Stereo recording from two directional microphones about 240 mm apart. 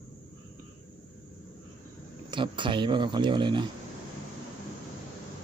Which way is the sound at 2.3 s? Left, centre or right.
Centre.